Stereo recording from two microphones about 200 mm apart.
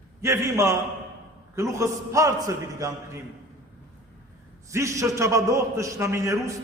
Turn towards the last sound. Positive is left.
turn(degrees=-15)  # may be behind; listen again after turning